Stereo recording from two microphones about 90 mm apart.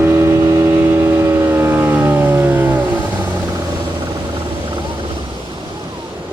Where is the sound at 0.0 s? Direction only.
30° right (ahead or behind).